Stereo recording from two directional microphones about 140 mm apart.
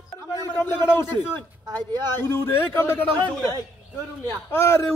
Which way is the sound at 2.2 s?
20° left (ahead or behind).